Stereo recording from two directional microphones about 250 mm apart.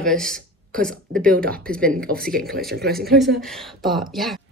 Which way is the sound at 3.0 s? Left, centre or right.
Centre.